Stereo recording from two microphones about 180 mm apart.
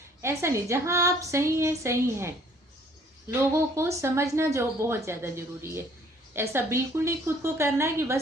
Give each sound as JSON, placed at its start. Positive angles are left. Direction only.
{"t": 0.2, "sound": "speech", "side_deg": -15}